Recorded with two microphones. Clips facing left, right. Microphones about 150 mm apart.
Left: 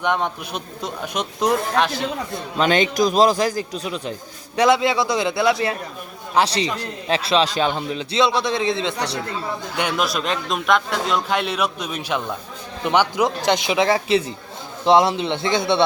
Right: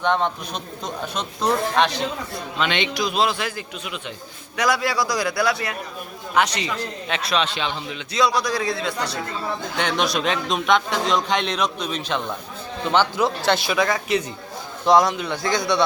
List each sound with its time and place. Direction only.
0.0 s speech: 10° left (ahead or behind)
2.6 s a man's voice: 40° left (ahead or behind)
4.5 s a man's voice: 25° left (ahead or behind)
9.7 s a man's voice: 5° left (ahead or behind); by 15.8 s 25° left (ahead or behind)